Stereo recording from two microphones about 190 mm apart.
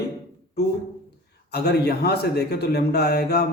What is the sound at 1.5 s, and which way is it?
A man's voice, 60° left (ahead or behind).